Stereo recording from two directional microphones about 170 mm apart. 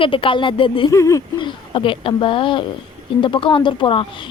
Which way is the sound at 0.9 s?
20° left (ahead or behind).